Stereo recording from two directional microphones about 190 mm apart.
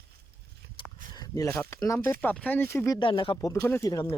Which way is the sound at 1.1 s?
20° left (ahead or behind).